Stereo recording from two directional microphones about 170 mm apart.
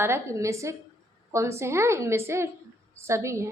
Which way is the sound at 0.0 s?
15° right (ahead or behind).